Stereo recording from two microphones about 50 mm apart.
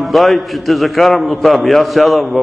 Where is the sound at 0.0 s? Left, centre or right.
Centre.